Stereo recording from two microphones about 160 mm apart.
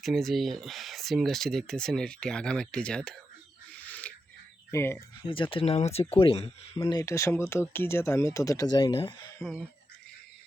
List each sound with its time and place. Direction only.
0.0 s speech: centre (ahead or behind)
3.7 s owl: 10° left (ahead or behind)
4.7 s speech: 15° left (ahead or behind)
5.2 s speech: 35° left (ahead or behind)
6.7 s speech: 20° left (ahead or behind)
9.4 s speech: centre (ahead or behind)